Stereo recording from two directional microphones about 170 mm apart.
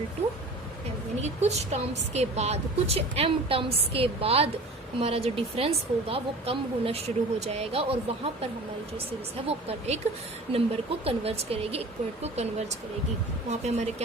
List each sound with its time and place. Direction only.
1.2 s speech: 40° right (ahead or behind)
9.5 s speech: 35° right (ahead or behind)
11.0 s speech: 35° right (ahead or behind)